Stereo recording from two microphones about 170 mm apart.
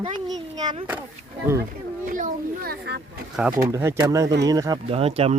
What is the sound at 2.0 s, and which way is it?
A child's voice, 50° right (ahead or behind).